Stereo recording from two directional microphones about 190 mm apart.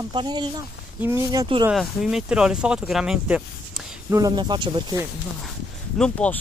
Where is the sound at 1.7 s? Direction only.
Centre (ahead or behind).